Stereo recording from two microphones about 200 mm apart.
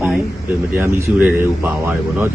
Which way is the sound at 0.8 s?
15° right (ahead or behind).